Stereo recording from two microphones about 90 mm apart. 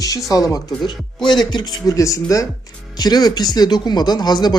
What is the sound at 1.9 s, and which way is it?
Speech, 35° left (ahead or behind).